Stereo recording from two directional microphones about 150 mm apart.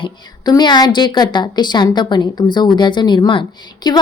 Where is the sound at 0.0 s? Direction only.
30° left (ahead or behind).